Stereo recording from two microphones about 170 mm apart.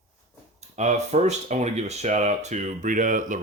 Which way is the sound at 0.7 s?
45° right (ahead or behind).